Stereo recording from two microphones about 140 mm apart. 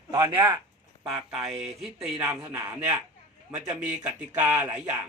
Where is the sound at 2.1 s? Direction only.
15° right (ahead or behind).